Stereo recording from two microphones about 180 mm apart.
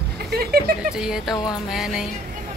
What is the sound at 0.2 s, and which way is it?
Speech, 60° right (ahead or behind).